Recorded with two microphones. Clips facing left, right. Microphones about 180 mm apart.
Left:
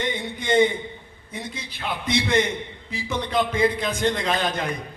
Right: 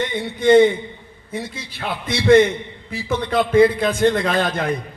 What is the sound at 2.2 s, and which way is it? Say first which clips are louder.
A man's voice: right 10 dB; 55° right (ahead or behind).